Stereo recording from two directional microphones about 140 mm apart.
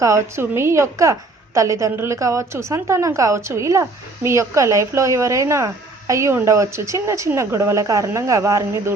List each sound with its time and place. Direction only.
0.0 s a woman's voice: 20° right (ahead or behind)